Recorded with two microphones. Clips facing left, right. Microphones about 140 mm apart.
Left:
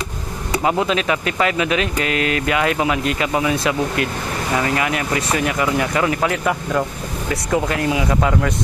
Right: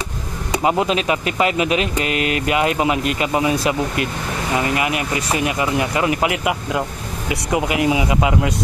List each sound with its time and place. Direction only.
1.4 s speech: 25° right (ahead or behind)
2.0 s speech: 35° left (ahead or behind)
2.4 s speech: 25° right (ahead or behind)
4.6 s speech: 15° right (ahead or behind)